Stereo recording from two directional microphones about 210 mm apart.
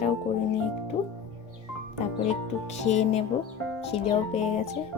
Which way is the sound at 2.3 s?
35° left (ahead or behind).